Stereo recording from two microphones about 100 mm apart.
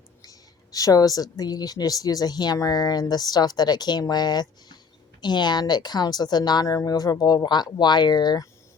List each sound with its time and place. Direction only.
0.2 s a woman's voice: 35° left (ahead or behind)